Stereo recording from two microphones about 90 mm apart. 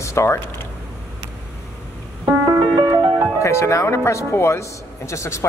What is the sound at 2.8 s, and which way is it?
Music, 55° right (ahead or behind).